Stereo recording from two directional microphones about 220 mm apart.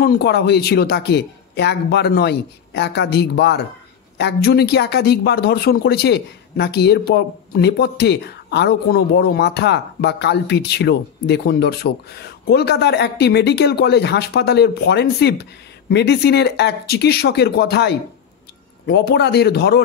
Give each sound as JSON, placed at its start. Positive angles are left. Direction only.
{"t": 0.0, "sound": "speech", "side_deg": 45}